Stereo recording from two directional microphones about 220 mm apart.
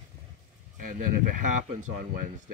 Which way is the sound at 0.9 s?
35° right (ahead or behind).